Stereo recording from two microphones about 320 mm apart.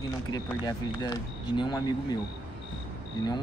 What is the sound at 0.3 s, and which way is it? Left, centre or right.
Speech, centre.